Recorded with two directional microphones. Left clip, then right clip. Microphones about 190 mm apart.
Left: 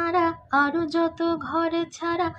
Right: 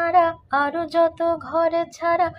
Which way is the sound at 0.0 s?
25° right (ahead or behind).